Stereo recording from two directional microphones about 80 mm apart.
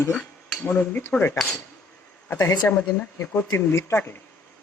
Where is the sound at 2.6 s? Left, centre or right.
Left.